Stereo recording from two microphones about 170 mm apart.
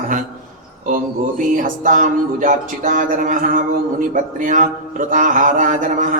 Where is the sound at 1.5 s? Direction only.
50° right (ahead or behind).